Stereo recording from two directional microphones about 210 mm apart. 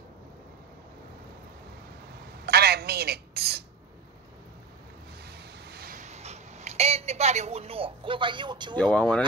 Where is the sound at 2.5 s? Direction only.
50° right (ahead or behind).